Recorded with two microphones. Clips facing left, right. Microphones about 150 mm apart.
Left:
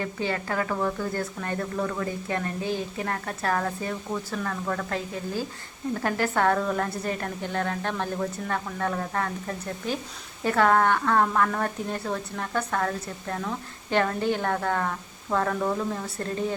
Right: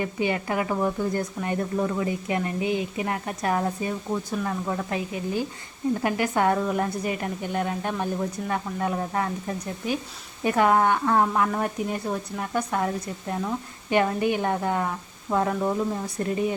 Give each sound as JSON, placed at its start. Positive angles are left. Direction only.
{"t": 0.0, "sound": "speech", "side_deg": -15}